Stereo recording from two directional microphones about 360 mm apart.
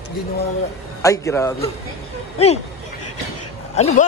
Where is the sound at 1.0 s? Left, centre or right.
Centre.